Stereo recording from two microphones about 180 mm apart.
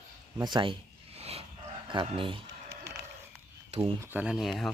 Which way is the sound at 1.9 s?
25° right (ahead or behind).